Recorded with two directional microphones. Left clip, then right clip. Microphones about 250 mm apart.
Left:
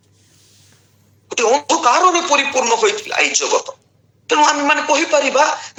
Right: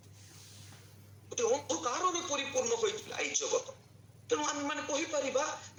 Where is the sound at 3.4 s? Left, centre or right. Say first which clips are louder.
Left 16 dB; left.